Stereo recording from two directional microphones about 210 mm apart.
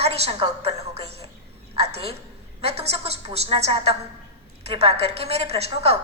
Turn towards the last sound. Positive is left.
turn(degrees=-30)  # may be behind; listen again after turning